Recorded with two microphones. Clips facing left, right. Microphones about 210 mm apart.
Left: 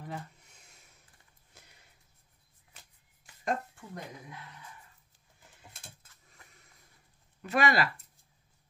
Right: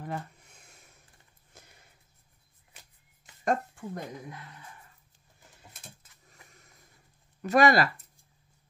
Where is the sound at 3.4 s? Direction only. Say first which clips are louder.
Right 5 dB; 50° right (ahead or behind).